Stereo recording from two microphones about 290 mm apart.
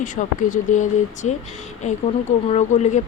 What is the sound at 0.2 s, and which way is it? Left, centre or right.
Speech, left.